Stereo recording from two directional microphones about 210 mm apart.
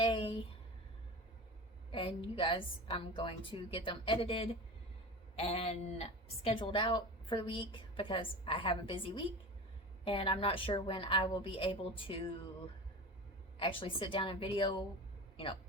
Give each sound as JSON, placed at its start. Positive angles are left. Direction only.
{"t": 0.0, "sound": "a sound", "side_deg": 25}
{"t": 1.9, "sound": "speech", "side_deg": 25}
{"t": 13.6, "sound": "speech", "side_deg": 25}